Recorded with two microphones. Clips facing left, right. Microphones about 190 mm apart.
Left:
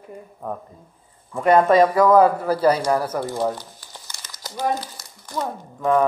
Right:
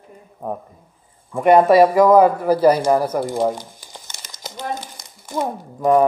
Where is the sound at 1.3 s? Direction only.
10° right (ahead or behind).